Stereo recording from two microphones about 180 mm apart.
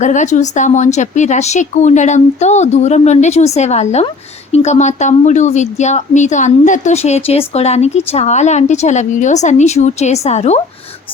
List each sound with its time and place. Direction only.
0.0 s speech: 40° left (ahead or behind)